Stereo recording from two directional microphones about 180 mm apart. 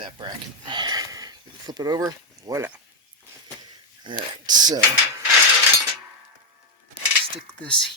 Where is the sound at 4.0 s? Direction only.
25° right (ahead or behind).